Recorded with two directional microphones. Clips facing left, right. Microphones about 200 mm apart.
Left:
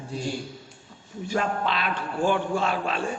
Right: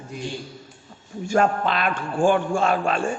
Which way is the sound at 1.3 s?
50° right (ahead or behind).